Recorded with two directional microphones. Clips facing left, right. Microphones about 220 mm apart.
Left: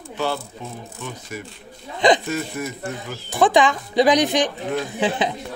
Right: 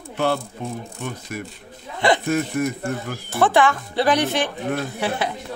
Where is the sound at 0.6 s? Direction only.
55° right (ahead or behind).